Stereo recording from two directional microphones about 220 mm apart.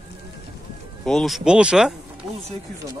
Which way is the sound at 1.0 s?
Centre (ahead or behind).